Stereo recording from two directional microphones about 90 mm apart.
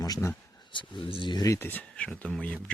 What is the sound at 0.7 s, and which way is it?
Speech, 65° left (ahead or behind).